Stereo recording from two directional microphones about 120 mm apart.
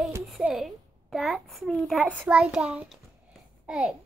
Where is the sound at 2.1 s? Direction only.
10° right (ahead or behind).